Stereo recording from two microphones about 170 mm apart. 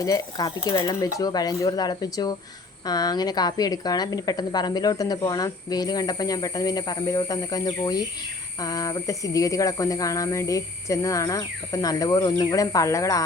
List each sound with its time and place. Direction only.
0.0 s a woman's voice: 20° left (ahead or behind)